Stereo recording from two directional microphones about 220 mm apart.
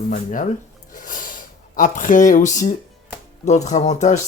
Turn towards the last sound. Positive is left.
turn(degrees=30)  # may be behind; listen again after turning